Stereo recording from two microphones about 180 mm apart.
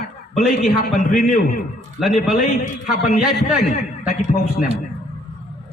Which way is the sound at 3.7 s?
45° left (ahead or behind).